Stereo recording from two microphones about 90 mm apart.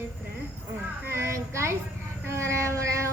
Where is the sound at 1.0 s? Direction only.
30° right (ahead or behind).